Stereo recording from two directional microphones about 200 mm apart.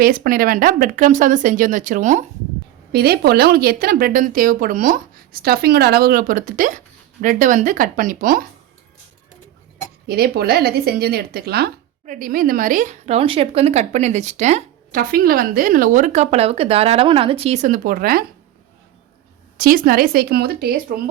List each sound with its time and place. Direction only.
0.0 s speech: 45° right (ahead or behind)
2.9 s speech: 50° right (ahead or behind)
10.1 s speech: 50° right (ahead or behind)
19.5 s speech: 45° right (ahead or behind)